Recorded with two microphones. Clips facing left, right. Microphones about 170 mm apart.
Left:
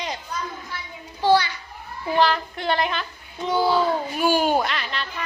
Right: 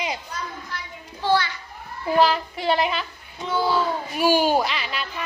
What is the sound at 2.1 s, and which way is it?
Speech, 5° right (ahead or behind).